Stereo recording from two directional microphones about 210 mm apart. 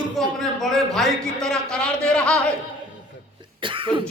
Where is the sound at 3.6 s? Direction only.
25° right (ahead or behind).